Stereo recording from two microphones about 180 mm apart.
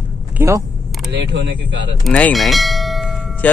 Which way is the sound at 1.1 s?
75° right (ahead or behind).